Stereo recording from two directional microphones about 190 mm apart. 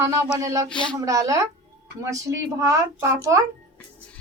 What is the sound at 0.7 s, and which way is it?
Speech, 5° left (ahead or behind).